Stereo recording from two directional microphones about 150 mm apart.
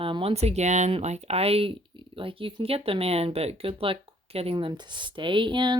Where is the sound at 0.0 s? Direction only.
35° right (ahead or behind).